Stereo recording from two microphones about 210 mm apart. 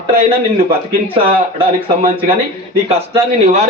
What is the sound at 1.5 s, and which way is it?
A man's voice, 25° right (ahead or behind).